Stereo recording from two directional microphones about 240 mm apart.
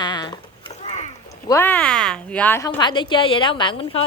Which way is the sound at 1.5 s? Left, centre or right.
Centre.